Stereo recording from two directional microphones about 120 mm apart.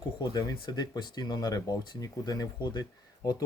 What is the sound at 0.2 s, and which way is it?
Speech, 35° left (ahead or behind).